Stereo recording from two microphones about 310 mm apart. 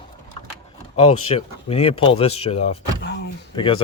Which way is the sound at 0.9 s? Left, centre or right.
Centre.